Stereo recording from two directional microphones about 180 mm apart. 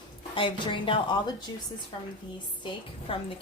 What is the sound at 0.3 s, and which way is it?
A woman's voice, 30° left (ahead or behind).